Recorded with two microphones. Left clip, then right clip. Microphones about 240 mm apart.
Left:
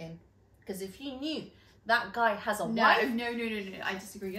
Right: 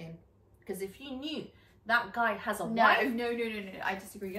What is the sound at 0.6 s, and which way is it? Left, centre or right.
A woman's voice, centre.